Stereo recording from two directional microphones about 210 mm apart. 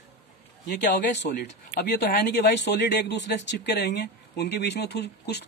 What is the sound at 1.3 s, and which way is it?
Speech, 50° left (ahead or behind).